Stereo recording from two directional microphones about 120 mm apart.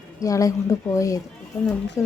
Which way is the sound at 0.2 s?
30° left (ahead or behind).